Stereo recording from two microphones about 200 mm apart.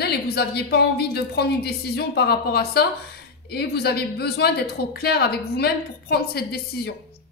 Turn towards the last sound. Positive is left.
turn(degrees=50)  # may be behind; listen again after turning